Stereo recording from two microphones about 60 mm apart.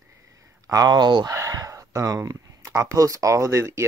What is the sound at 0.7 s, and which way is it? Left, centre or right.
Speech, right.